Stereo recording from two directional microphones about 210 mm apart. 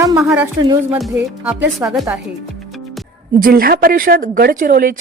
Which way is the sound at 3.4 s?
45° right (ahead or behind).